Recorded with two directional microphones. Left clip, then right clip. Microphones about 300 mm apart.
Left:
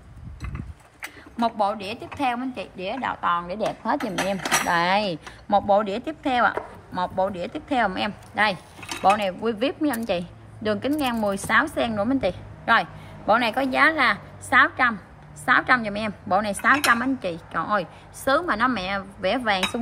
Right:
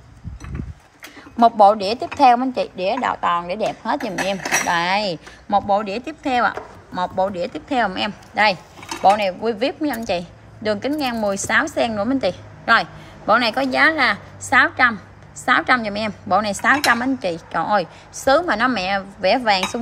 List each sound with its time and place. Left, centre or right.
1.3 s a woman's voice: centre